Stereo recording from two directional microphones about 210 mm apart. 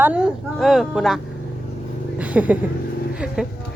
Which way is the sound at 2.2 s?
5° right (ahead or behind).